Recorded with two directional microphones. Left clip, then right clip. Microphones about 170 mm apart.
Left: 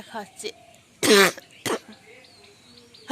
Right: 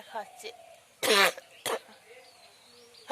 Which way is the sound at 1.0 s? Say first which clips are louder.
Left 6 dB; 15° left (ahead or behind).